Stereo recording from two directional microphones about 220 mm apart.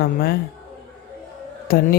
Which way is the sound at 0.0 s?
45° left (ahead or behind).